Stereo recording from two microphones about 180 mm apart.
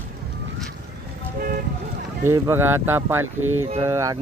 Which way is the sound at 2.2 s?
15° right (ahead or behind).